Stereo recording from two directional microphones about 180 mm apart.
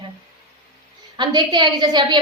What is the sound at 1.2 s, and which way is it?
A woman's voice, 25° right (ahead or behind).